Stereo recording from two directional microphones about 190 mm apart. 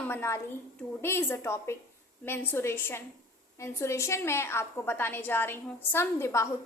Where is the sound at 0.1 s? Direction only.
15° left (ahead or behind).